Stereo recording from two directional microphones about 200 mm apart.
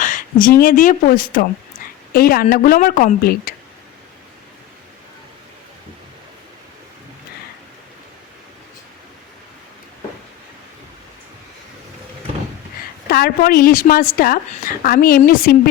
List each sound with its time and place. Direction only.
0.0 s speech: 40° left (ahead or behind)
13.1 s a woman's voice: 50° left (ahead or behind)